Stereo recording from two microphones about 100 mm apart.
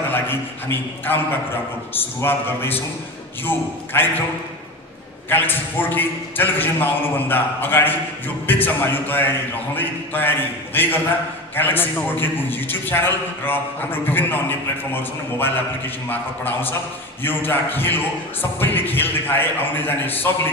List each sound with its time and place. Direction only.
0.1 s a man's voice: 20° left (ahead or behind)
5.3 s a man's voice: 20° left (ahead or behind)